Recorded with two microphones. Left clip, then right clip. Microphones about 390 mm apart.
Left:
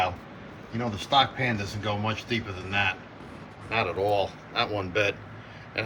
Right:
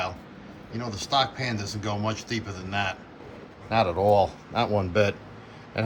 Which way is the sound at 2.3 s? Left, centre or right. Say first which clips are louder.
Left 2 dB; right.